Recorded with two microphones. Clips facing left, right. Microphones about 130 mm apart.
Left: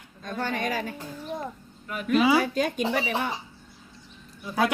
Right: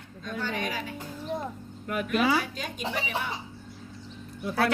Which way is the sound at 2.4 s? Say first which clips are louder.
Left 9 dB; 45° left (ahead or behind).